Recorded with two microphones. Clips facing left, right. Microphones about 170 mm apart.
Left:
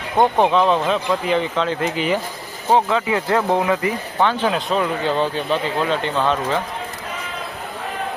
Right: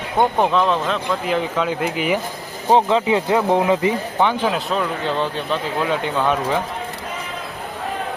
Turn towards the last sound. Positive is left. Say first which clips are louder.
# even
turn(degrees=-10)  # may be behind; listen again after turning